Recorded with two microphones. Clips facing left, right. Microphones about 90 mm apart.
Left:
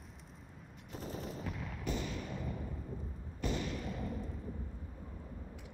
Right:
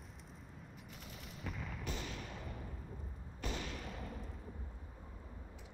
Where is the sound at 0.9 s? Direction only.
35° left (ahead or behind).